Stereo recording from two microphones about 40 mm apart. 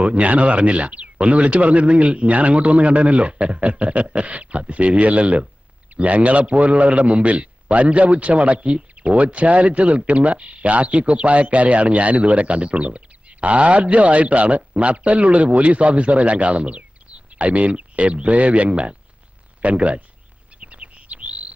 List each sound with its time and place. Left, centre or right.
0.0 s a man's voice: right
20.6 s chirp: right